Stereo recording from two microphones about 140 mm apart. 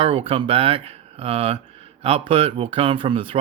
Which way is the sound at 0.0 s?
40° right (ahead or behind).